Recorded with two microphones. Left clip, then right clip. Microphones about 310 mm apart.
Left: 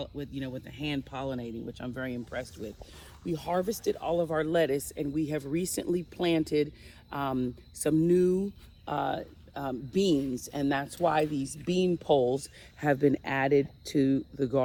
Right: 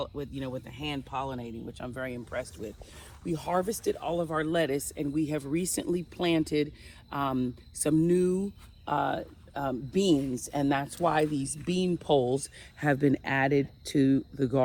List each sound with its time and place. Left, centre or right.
0.0 s speech: centre
3.3 s speech: centre